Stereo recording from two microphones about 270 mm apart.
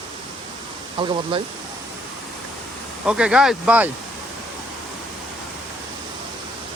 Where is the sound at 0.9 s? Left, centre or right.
Centre.